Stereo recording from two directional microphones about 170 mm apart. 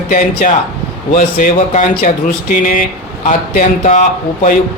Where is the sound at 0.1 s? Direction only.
50° left (ahead or behind).